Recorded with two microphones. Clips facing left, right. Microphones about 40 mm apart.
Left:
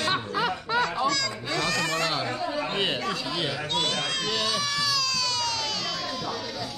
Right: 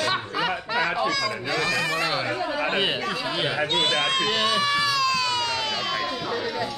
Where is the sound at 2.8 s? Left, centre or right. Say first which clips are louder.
Right 2 dB; centre.